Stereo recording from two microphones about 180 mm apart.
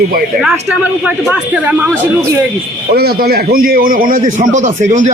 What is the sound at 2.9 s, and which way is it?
A man's voice, 60° right (ahead or behind).